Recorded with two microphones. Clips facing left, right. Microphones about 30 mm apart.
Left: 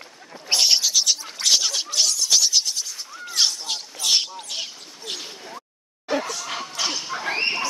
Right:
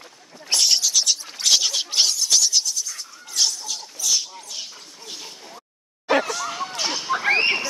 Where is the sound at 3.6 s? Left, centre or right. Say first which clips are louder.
Left 2 dB; left.